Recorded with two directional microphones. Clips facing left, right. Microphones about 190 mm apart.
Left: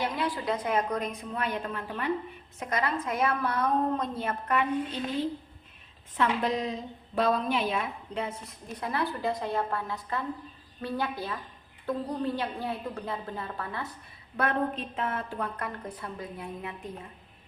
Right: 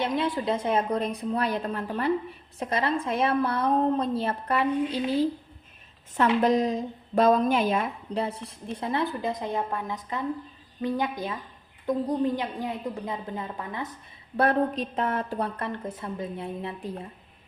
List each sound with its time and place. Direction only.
0.0 s a woman's voice: 25° right (ahead or behind)
6.1 s a woman's voice: 45° right (ahead or behind); by 13.9 s 15° right (ahead or behind)
14.3 s a woman's voice: 35° right (ahead or behind)
15.5 s a woman's voice: 25° right (ahead or behind)